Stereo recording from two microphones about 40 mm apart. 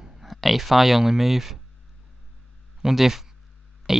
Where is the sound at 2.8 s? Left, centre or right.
Centre.